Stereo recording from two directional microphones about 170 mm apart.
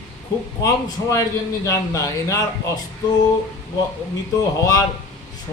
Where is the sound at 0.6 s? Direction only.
20° left (ahead or behind).